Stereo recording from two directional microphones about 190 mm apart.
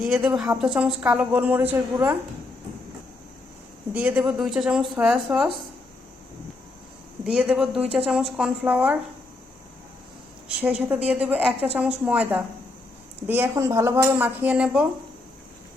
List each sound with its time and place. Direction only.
0.0 s speech: 5° right (ahead or behind)
3.9 s speech: 10° right (ahead or behind)
7.3 s speech: 5° right (ahead or behind)
10.6 s speech: 5° right (ahead or behind)